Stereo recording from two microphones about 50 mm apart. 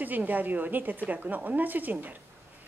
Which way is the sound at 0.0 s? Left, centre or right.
Right.